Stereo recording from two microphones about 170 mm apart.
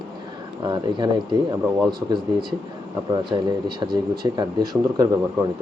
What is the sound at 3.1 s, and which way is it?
Speech, 25° right (ahead or behind).